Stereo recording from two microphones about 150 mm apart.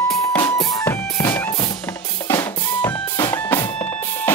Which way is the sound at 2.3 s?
20° left (ahead or behind).